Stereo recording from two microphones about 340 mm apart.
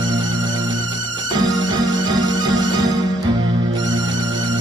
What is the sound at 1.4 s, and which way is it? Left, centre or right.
Music, centre.